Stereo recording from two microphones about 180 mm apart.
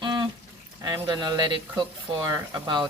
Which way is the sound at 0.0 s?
25° right (ahead or behind).